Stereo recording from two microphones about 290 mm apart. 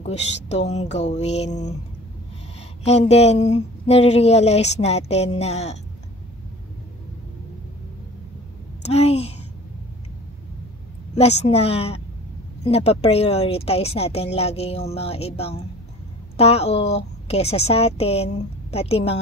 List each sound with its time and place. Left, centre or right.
0.0 s speech: left
2.8 s speech: left
8.8 s speech: left
11.1 s speech: left